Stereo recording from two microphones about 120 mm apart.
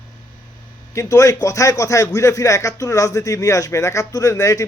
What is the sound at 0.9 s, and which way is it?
Speech, 25° left (ahead or behind).